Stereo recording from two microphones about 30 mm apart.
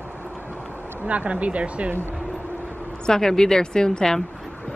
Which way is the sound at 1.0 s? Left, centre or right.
Right.